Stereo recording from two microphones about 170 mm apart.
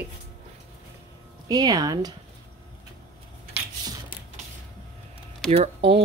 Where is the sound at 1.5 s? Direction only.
20° right (ahead or behind).